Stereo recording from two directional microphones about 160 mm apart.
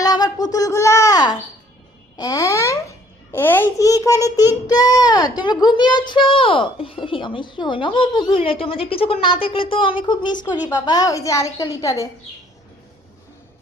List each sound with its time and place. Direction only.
0.0 s a sound: 25° left (ahead or behind)
2.1 s babbling: 25° left (ahead or behind)
3.3 s a woman's voice: 15° left (ahead or behind)